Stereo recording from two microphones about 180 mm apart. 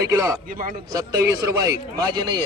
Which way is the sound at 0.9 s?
20° right (ahead or behind).